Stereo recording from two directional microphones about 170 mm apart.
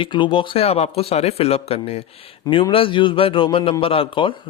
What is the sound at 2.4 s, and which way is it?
Speech, 20° left (ahead or behind).